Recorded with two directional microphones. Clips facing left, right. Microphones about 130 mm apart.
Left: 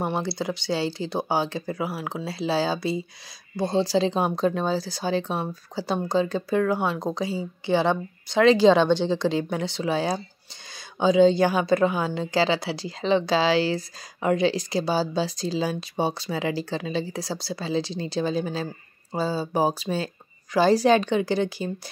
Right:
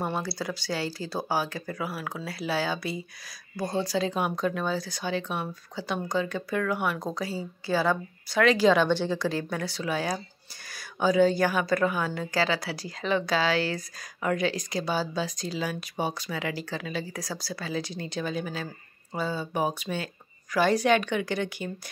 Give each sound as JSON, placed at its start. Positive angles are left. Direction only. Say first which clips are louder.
{"t": 0.0, "sound": "speech", "louder": "left 4 dB", "side_deg": 25}